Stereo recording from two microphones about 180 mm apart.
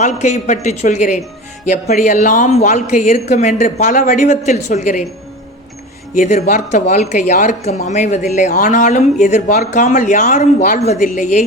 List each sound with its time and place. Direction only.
0.0 s speech: 40° left (ahead or behind)
6.1 s speech: 40° left (ahead or behind)